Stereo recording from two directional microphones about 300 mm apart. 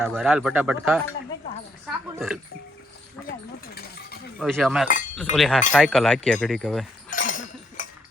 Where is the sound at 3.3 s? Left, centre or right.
Left.